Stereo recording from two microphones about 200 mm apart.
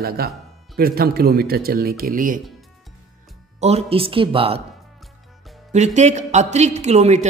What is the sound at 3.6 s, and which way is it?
Speech, 30° right (ahead or behind).